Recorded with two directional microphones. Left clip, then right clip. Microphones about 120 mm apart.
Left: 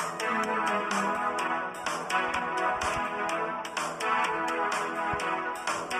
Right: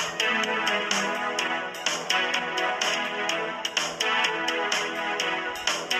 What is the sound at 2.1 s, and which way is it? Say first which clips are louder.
Music: right 1 dB; 20° right (ahead or behind).